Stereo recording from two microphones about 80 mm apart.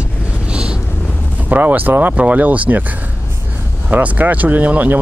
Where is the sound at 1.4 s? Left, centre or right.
Right.